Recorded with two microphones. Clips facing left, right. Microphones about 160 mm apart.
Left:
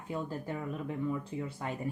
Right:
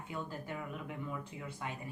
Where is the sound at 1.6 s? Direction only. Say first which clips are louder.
Left 5 dB; 40° left (ahead or behind).